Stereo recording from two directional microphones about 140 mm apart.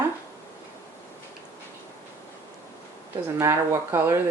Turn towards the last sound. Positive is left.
turn(degrees=-15)  # may be behind; listen again after turning